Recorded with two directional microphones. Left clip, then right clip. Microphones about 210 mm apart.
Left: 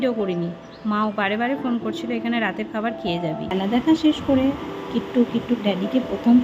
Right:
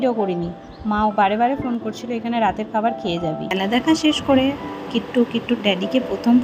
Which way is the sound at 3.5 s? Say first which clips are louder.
Right 1 dB; 35° right (ahead or behind).